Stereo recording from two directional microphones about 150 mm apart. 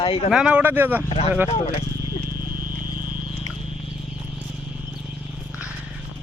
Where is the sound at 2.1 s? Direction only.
25° left (ahead or behind).